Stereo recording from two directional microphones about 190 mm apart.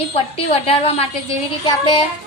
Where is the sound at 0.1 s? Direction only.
35° left (ahead or behind).